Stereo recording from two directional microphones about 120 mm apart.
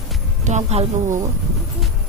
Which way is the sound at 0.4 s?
70° right (ahead or behind).